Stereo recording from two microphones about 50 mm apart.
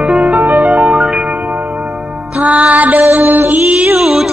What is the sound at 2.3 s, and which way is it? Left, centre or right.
Music, right.